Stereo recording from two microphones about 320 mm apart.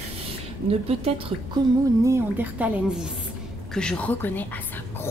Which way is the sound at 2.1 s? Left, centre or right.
Centre.